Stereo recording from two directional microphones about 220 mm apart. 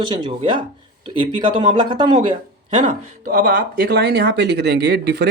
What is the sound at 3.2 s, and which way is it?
Speech, 40° right (ahead or behind).